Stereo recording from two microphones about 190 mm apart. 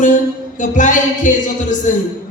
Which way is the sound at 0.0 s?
40° left (ahead or behind).